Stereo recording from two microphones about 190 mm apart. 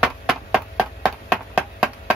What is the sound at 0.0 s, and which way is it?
Chop, centre (ahead or behind).